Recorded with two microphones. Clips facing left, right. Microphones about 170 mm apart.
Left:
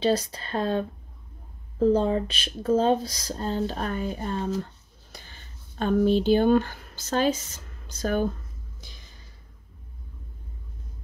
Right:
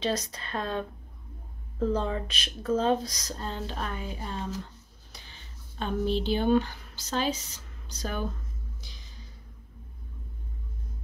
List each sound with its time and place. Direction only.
0.0 s speech: 30° left (ahead or behind); by 8.2 s 50° left (ahead or behind)